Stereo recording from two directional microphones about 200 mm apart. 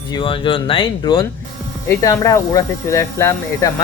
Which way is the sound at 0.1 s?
25° left (ahead or behind).